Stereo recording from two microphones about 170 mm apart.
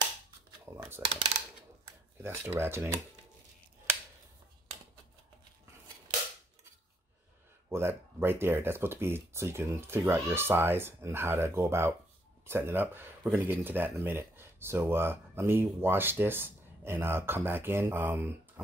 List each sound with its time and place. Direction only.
0.7 s speech: 15° right (ahead or behind)
1.0 s speech: 30° right (ahead or behind)
1.9 s speech: 15° right (ahead or behind)
7.7 s speech: 15° right (ahead or behind)